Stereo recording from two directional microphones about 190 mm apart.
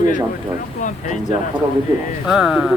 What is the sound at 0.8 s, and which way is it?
Speech, 40° left (ahead or behind).